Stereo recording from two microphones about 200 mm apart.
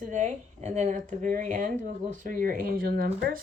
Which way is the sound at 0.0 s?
40° right (ahead or behind).